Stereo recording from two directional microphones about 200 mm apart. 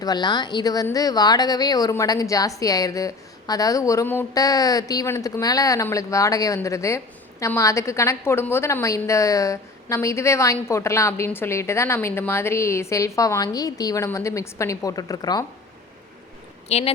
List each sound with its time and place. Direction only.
0.0 s speech: 20° left (ahead or behind)
16.6 s speech: 35° left (ahead or behind)